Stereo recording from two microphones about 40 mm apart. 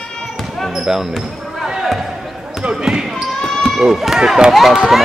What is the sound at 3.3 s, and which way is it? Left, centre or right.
Basketball bounce, centre.